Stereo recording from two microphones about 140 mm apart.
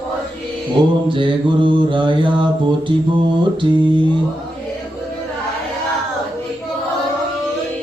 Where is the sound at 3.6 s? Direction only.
35° right (ahead or behind).